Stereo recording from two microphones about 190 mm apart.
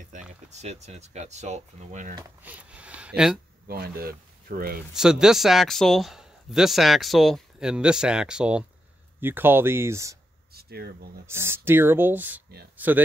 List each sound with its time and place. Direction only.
0.1 s a sound: 40° right (ahead or behind)
0.5 s speech: 35° right (ahead or behind)
2.4 s speech: 5° right (ahead or behind)
3.6 s speech: 55° right (ahead or behind)
4.9 s speech: 5° right (ahead or behind)
10.5 s speech: 55° right (ahead or behind)
11.2 s speech: 15° right (ahead or behind)